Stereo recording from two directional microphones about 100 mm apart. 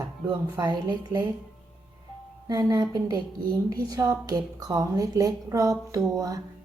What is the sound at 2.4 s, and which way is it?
A woman's voice, 40° right (ahead or behind).